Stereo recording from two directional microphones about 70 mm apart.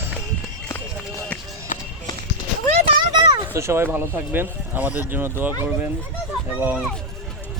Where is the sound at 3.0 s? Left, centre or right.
Right.